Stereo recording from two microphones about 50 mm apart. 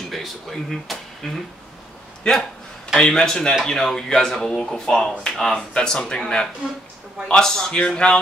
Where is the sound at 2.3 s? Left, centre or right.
Centre.